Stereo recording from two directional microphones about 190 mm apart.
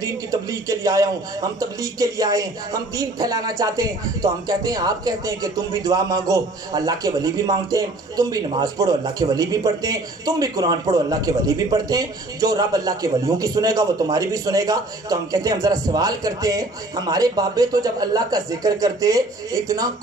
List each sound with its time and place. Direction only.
0.0 s a man's voice: 15° right (ahead or behind)